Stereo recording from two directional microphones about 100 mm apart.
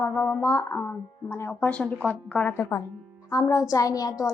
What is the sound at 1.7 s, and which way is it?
Speech, 10° left (ahead or behind).